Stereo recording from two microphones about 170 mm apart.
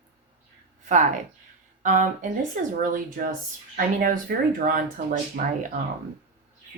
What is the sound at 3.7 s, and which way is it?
Speech, 55° right (ahead or behind).